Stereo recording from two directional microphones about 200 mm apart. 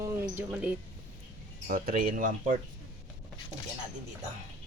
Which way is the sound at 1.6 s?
45° right (ahead or behind).